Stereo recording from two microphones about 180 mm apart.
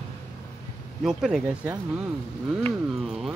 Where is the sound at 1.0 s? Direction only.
5° right (ahead or behind).